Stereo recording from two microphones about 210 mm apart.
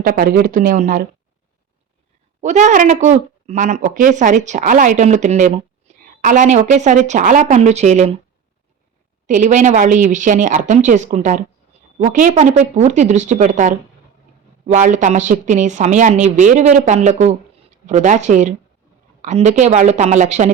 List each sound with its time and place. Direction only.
0.0 s speech: 45° right (ahead or behind)
2.4 s speech: 35° right (ahead or behind)
9.2 s speech: 35° right (ahead or behind)